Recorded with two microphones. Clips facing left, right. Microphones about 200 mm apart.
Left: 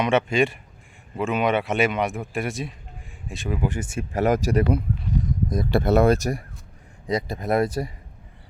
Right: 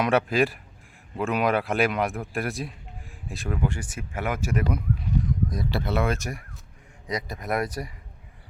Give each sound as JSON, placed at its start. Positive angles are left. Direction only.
{"t": 0.0, "sound": "speech", "side_deg": 0}
{"t": 3.6, "sound": "speech", "side_deg": 20}
{"t": 5.5, "sound": "speech", "side_deg": 50}